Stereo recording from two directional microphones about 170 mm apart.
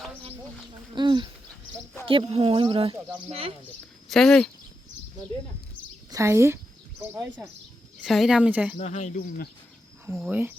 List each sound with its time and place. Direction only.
0.9 s a sound: 25° right (ahead or behind)
2.0 s speech: 35° right (ahead or behind)
4.1 s speech: centre (ahead or behind)
6.1 s a woman's voice: 15° right (ahead or behind)
8.0 s speech: centre (ahead or behind)
8.8 s speech: 45° left (ahead or behind)
10.2 s speech: 5° right (ahead or behind)